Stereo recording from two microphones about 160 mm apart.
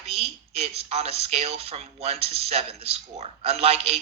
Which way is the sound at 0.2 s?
40° right (ahead or behind).